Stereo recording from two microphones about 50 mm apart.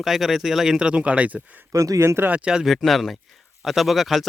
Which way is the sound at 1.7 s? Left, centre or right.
Right.